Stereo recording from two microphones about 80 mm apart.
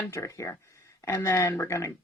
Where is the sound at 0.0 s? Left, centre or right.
Left.